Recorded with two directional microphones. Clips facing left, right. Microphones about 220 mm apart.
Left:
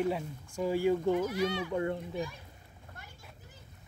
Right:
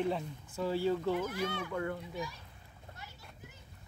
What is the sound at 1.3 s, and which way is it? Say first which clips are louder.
Speech: left 5 dB; 55° right (ahead or behind).